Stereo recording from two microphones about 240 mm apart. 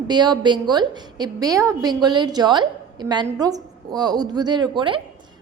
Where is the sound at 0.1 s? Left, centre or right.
Centre.